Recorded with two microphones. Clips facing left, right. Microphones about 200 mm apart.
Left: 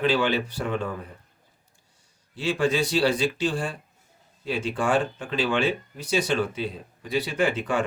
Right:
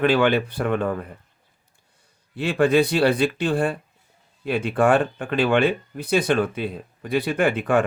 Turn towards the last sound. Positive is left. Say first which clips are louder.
# right 5 dB
turn(degrees=-55)  # may be behind; listen again after turning